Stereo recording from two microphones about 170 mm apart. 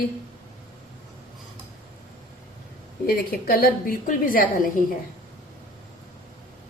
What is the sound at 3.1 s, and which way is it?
A woman's voice, 60° left (ahead or behind).